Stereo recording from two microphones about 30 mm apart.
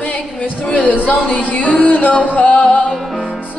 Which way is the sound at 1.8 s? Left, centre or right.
Left.